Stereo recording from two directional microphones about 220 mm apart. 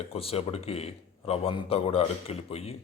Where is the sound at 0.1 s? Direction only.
25° left (ahead or behind).